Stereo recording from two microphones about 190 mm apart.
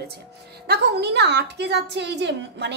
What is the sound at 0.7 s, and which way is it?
A woman's voice, 60° right (ahead or behind).